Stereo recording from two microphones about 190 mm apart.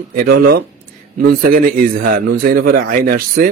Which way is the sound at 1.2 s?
50° right (ahead or behind).